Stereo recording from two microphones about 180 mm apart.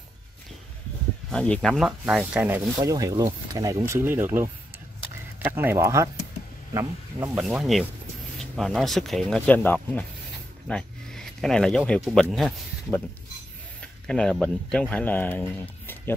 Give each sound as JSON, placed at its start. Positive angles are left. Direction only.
{"t": 1.3, "sound": "speech", "side_deg": 5}
{"t": 7.4, "sound": "speech", "side_deg": 0}
{"t": 14.0, "sound": "speech", "side_deg": 5}